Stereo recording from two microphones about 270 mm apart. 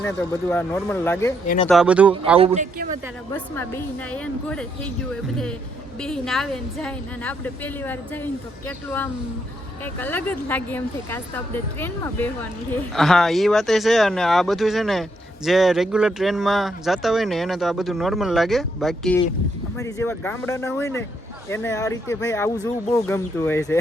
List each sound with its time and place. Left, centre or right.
0.5 s speech: centre
2.4 s speech: right
3.3 s speech: centre
6.0 s speech: centre